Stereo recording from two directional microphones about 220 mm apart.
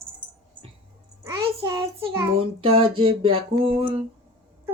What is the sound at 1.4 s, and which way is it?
Child singing, 20° right (ahead or behind).